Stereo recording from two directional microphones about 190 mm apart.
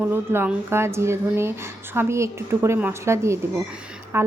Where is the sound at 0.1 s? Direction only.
10° right (ahead or behind).